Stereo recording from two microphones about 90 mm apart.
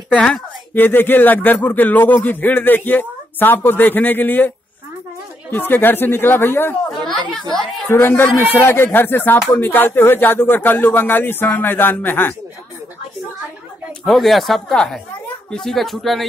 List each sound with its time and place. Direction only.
0.1 s speech: 10° left (ahead or behind)
0.7 s speech: 20° left (ahead or behind)
5.5 s speech: 25° left (ahead or behind)
7.9 s speech: 25° left (ahead or behind)
14.0 s speech: centre (ahead or behind)